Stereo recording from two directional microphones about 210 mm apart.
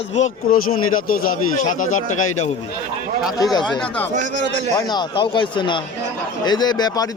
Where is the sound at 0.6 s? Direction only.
90° left.